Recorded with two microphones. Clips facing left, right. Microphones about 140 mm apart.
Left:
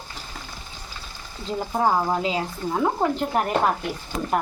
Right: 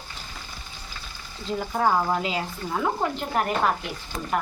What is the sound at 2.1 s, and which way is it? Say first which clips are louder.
Speech: left 2 dB; 30° left (ahead or behind).